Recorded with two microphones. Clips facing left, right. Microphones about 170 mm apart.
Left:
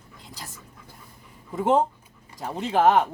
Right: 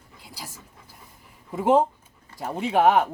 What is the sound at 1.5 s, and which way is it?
Speech, 10° right (ahead or behind).